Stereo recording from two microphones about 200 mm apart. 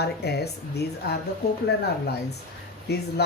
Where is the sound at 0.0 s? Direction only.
55° left (ahead or behind).